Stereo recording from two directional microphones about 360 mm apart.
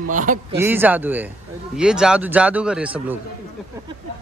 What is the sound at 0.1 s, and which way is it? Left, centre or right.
Speech, right.